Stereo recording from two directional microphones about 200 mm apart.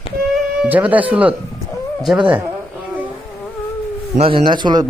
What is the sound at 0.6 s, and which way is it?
Speech, 5° right (ahead or behind).